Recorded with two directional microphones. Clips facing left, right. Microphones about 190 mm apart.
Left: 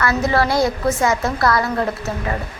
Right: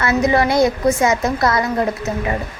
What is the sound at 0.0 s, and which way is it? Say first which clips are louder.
A woman's voice: right 2 dB; 20° right (ahead or behind).